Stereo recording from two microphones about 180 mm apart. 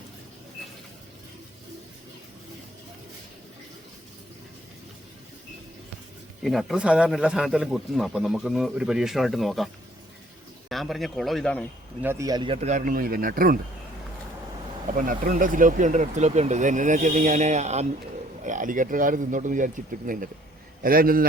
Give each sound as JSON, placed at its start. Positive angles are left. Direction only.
{"t": 6.4, "sound": "a man's voice", "side_deg": 0}
{"t": 10.7, "sound": "a man's voice", "side_deg": 0}
{"t": 12.0, "sound": "speech", "side_deg": -15}
{"t": 12.5, "sound": "speech", "side_deg": -40}
{"t": 14.9, "sound": "speech", "side_deg": -50}